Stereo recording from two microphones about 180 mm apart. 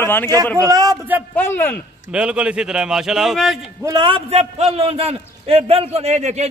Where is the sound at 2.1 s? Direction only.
5° right (ahead or behind).